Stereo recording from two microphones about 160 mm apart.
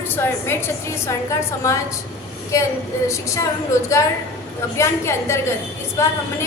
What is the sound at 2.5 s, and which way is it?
Speech, 20° left (ahead or behind).